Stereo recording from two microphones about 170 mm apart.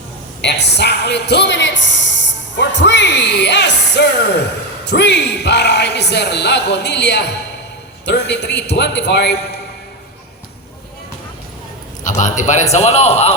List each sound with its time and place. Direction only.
0.4 s a man's voice: 80° left
12.0 s a man's voice: 45° left (ahead or behind)